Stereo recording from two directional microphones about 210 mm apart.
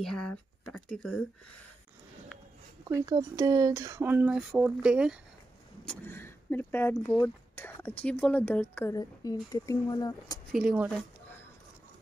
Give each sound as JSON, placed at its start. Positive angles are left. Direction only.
{"t": 0.0, "sound": "speech", "side_deg": 0}
{"t": 2.8, "sound": "speech", "side_deg": -15}
{"t": 5.9, "sound": "a woman's voice", "side_deg": 10}
{"t": 10.5, "sound": "speech", "side_deg": 0}